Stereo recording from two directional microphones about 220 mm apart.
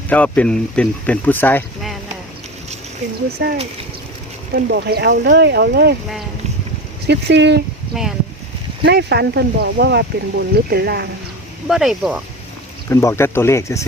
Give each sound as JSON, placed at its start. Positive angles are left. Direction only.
{"t": 0.1, "sound": "speech", "side_deg": 5}
{"t": 3.4, "sound": "speech", "side_deg": -50}
{"t": 7.1, "sound": "speech", "side_deg": -50}
{"t": 7.9, "sound": "speech", "side_deg": 0}
{"t": 8.8, "sound": "speech", "side_deg": -50}
{"t": 11.7, "sound": "speech", "side_deg": 0}
{"t": 12.9, "sound": "speech", "side_deg": 10}